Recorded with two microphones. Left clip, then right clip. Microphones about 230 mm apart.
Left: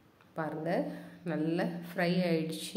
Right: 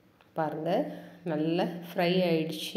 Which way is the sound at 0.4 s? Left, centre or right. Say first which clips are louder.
Right 4 dB; centre.